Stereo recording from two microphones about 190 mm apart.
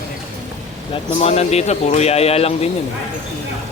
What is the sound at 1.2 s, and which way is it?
Speech, 35° left (ahead or behind).